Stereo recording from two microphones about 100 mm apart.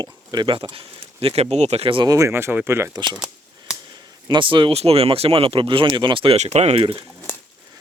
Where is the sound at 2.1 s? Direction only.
30° right (ahead or behind).